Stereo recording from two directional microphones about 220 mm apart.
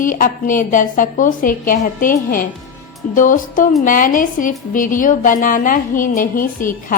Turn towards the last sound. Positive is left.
turn(degrees=40)  # may be behind; listen again after turning